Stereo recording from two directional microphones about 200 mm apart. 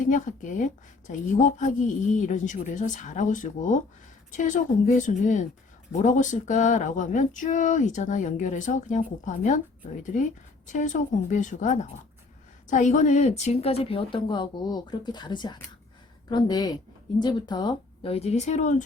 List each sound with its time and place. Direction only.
0.0 s a woman's voice: 40° left (ahead or behind)
10.7 s a woman's voice: 40° left (ahead or behind)